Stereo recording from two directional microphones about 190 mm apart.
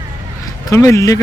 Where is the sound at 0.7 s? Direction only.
15° left (ahead or behind).